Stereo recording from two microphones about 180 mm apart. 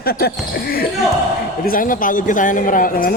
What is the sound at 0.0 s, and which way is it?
Speech, 60° left (ahead or behind).